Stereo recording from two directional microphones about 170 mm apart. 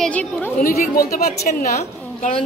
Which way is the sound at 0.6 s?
55° left (ahead or behind).